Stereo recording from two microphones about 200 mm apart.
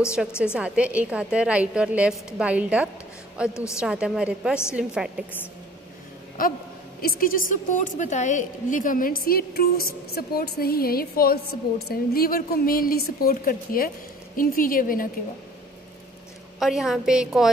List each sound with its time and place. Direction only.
0.2 s a woman's voice: centre (ahead or behind)
3.4 s a woman's voice: 15° left (ahead or behind)
3.8 s a woman's voice: 5° right (ahead or behind)
6.4 s a woman's voice: 45° left (ahead or behind)
16.5 s a woman's voice: centre (ahead or behind)